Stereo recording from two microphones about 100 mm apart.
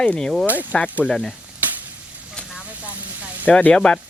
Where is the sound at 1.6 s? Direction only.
15° right (ahead or behind).